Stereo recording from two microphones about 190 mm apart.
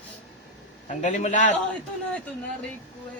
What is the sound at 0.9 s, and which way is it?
Speech, 40° left (ahead or behind).